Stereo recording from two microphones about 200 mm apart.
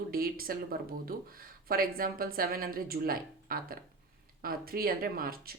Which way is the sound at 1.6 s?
45° right (ahead or behind).